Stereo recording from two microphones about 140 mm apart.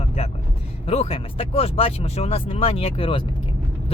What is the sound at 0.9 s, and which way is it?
Speech, 45° left (ahead or behind).